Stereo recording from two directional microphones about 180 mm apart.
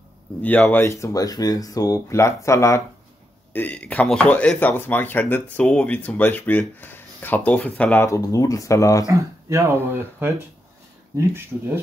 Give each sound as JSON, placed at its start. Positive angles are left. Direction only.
{"t": 0.4, "sound": "speech", "side_deg": 10}
{"t": 9.1, "sound": "speech", "side_deg": -15}